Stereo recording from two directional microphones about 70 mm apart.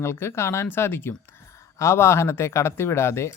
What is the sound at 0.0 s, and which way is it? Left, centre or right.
Speech, left.